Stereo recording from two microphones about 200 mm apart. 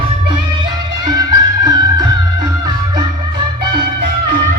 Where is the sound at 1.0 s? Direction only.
20° right (ahead or behind).